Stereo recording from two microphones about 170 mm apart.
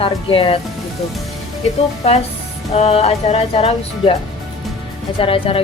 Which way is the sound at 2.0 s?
35° left (ahead or behind).